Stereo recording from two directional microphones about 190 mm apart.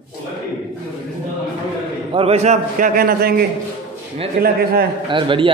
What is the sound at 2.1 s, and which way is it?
A man's voice, 35° right (ahead or behind).